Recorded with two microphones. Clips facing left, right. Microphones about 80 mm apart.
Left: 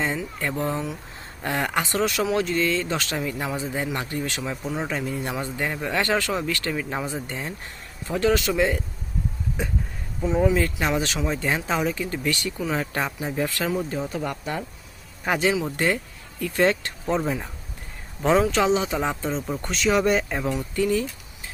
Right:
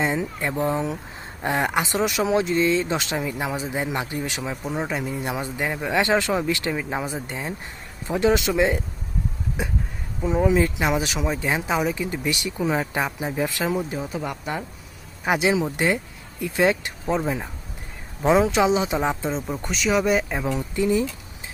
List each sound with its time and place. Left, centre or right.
0.0 s speech: centre
19.6 s speech: centre
20.5 s speech: right